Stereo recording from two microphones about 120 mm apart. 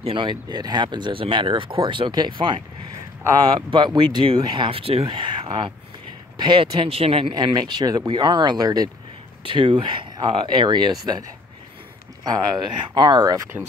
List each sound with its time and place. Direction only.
0.0 s speech: 45° right (ahead or behind)
3.7 s speech: 40° right (ahead or behind)
7.3 s speech: 35° right (ahead or behind)
9.4 s speech: 45° right (ahead or behind)
12.3 s speech: 35° right (ahead or behind)